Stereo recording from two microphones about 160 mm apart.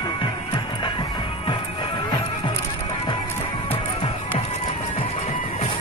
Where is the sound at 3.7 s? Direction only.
40° left (ahead or behind).